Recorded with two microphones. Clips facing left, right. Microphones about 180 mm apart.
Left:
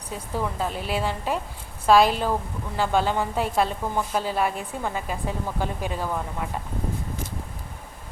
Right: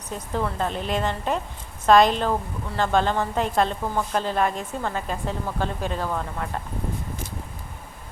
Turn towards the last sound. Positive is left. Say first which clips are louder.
# right 1 dB
turn(degrees=10)  # may be behind; listen again after turning